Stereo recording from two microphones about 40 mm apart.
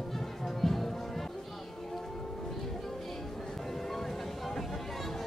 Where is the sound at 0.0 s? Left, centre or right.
Centre.